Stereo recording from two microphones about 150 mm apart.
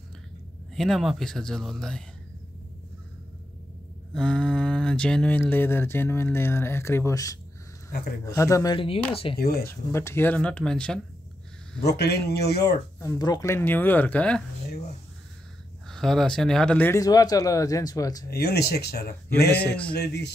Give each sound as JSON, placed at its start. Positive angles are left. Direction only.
{"t": 0.7, "sound": "speech", "side_deg": 0}
{"t": 4.1, "sound": "speech", "side_deg": 5}
{"t": 8.7, "sound": "speech", "side_deg": 40}
{"t": 9.4, "sound": "speech", "side_deg": 90}
{"t": 9.7, "sound": "speech", "side_deg": 15}
{"t": 11.8, "sound": "speech", "side_deg": 90}
{"t": 13.0, "sound": "speech", "side_deg": 25}
{"t": 15.9, "sound": "speech", "side_deg": 5}
{"t": 17.0, "sound": "speech", "side_deg": 25}
{"t": 18.3, "sound": "speech", "side_deg": 90}